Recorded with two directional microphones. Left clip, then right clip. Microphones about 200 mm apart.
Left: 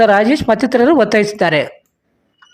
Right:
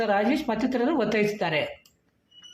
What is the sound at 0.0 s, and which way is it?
Speech, 50° left (ahead or behind).